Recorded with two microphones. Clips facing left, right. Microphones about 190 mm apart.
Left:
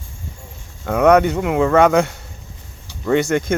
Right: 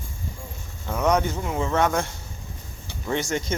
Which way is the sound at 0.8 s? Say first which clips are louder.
Left 9 dB; 65° left (ahead or behind).